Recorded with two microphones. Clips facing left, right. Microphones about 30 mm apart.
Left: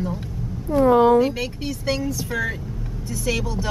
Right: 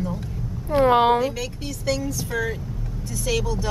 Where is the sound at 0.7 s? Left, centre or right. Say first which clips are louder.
Left 2 dB; right.